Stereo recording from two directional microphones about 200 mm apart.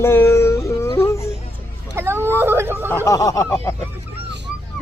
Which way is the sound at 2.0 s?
10° right (ahead or behind).